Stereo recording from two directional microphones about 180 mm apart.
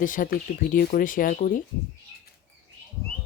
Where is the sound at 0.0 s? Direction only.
50° left (ahead or behind).